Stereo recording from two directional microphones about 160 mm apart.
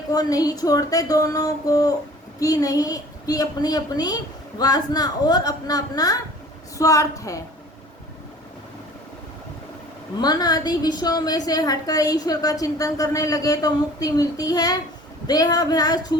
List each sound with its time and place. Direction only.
0.1 s a woman's voice: 25° left (ahead or behind)
10.2 s a woman's voice: 25° left (ahead or behind)